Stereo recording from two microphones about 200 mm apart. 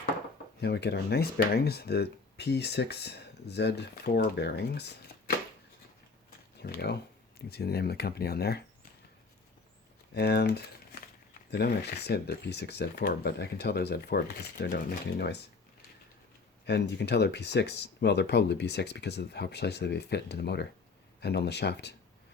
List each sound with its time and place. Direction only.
0.6 s speech: 55° left (ahead or behind)
6.6 s speech: 55° left (ahead or behind)
10.2 s speech: 55° left (ahead or behind)
16.6 s speech: 55° left (ahead or behind)